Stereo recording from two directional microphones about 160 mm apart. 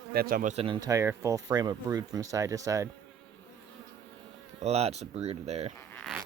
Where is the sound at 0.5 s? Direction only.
30° right (ahead or behind).